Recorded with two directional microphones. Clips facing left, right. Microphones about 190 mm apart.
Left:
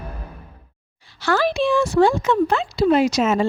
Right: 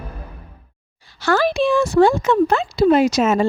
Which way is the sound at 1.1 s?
45° right (ahead or behind).